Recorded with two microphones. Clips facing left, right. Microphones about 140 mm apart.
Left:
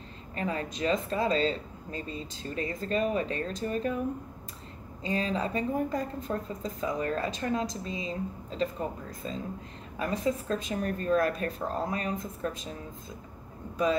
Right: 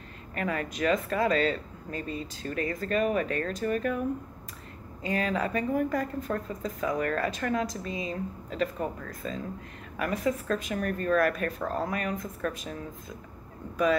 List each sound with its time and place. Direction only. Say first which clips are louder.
0.3 s a woman's voice: right 1 dB; 25° left (ahead or behind)
5.0 s a woman's voice: right 1 dB; 25° left (ahead or behind)